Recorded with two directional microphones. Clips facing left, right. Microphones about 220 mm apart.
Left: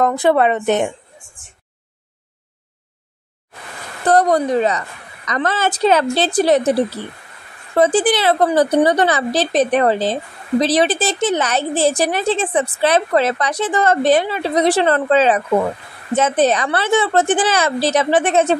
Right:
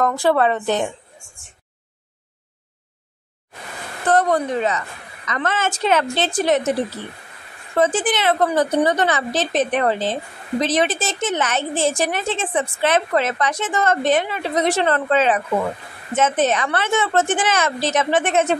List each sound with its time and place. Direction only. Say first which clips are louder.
0.0 s a woman's voice: left 3 dB; 20° left (ahead or behind)
4.1 s a woman's voice: left 4 dB; 35° left (ahead or behind)